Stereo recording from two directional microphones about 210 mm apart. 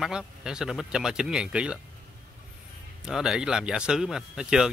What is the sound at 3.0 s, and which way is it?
Speech, 5° right (ahead or behind).